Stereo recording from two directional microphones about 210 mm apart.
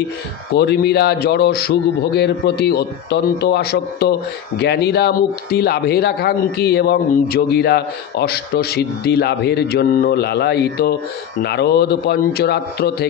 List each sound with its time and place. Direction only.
0.6 s speech: 50° left (ahead or behind)